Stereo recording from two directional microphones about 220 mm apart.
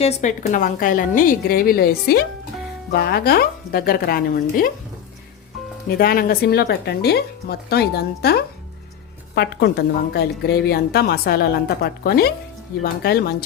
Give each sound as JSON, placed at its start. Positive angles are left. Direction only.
{"t": 0.0, "sound": "a woman's voice", "side_deg": 30}
{"t": 6.0, "sound": "a woman's voice", "side_deg": 40}